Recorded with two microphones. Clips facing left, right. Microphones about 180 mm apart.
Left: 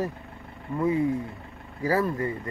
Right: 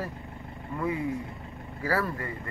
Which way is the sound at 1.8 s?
20° left (ahead or behind).